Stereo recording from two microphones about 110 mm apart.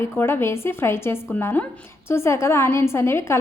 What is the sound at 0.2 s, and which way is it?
A woman's voice, 20° left (ahead or behind).